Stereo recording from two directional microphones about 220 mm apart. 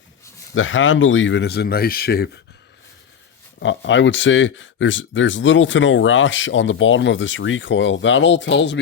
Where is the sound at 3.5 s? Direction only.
55° left (ahead or behind).